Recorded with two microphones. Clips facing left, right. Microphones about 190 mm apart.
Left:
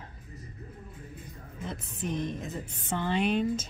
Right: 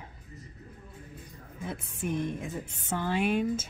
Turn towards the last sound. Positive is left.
turn(degrees=-10)  # may be behind; listen again after turning